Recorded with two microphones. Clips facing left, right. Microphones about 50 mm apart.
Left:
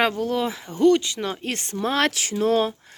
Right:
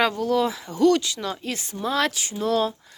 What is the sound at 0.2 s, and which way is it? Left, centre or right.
Speech, left.